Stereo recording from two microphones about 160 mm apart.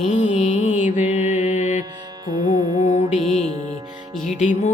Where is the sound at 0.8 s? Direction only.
45° left (ahead or behind).